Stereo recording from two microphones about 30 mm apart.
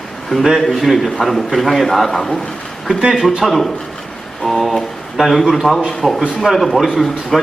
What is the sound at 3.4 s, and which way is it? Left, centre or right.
Speech, centre.